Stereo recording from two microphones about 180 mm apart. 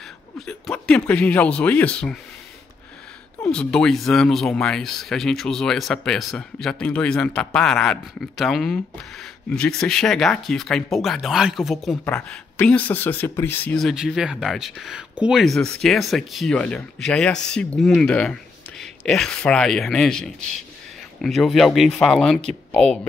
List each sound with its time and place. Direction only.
0.5 s speech: 5° left (ahead or behind)
3.4 s speech: 5° left (ahead or behind)